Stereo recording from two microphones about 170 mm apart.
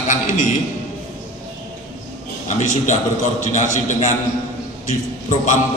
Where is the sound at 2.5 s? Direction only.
45° left (ahead or behind).